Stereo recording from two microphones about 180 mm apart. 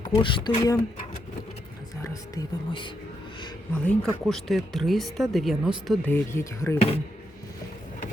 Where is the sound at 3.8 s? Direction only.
Centre (ahead or behind).